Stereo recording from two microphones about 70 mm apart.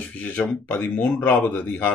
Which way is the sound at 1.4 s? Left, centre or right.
Left.